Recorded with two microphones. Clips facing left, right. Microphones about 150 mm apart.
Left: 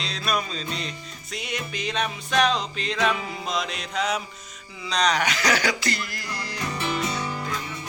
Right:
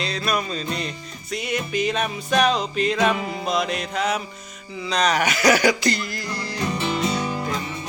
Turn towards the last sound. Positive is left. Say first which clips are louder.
# right 5 dB
turn(degrees=-20)  # may be behind; listen again after turning